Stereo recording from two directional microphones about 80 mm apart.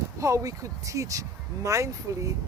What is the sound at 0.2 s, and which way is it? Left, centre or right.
Speech, right.